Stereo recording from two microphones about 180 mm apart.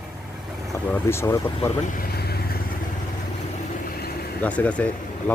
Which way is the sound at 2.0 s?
60° left (ahead or behind).